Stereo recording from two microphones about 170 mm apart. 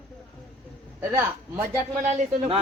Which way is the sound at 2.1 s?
45° right (ahead or behind).